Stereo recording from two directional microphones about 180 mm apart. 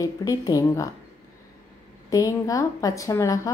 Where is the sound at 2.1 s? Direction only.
20° left (ahead or behind).